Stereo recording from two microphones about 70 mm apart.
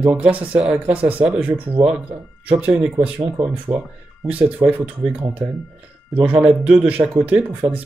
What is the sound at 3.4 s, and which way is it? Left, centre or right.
Speech, right.